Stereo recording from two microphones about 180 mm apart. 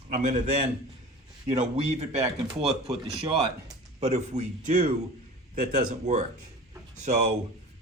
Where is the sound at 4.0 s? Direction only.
40° right (ahead or behind).